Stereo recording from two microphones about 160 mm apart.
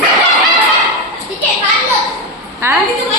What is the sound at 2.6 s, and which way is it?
Speech, 15° right (ahead or behind).